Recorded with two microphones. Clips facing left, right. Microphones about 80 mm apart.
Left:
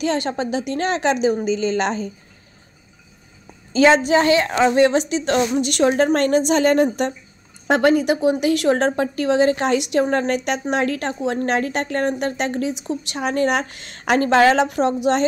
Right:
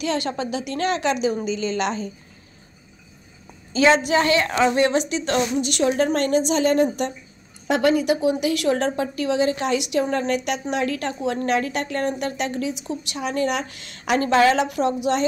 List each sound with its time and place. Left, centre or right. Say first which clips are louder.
0.0 s speech: left 3 dB; left
3.7 s a woman's voice: left 3 dB; left
5.6 s a woman's voice: left 3 dB; left